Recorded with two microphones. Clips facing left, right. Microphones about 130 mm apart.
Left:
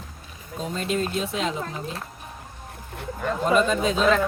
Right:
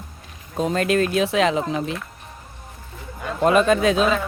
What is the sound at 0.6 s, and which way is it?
Speech, 80° right.